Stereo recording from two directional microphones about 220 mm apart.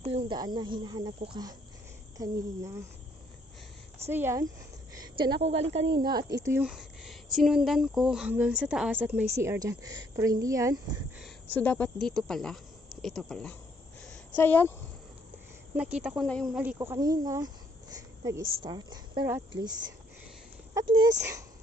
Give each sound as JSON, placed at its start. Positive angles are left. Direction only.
{"t": 0.0, "sound": "speech", "side_deg": -25}
{"t": 4.1, "sound": "speech", "side_deg": -10}
{"t": 4.9, "sound": "a sound", "side_deg": -20}
{"t": 5.4, "sound": "speech", "side_deg": -30}
{"t": 6.1, "sound": "speech", "side_deg": -50}
{"t": 6.4, "sound": "speech", "side_deg": -10}
{"t": 11.2, "sound": "speech", "side_deg": 5}
{"t": 14.0, "sound": "a sound", "side_deg": 5}
{"t": 15.7, "sound": "speech", "side_deg": -5}
{"t": 20.7, "sound": "speech", "side_deg": -20}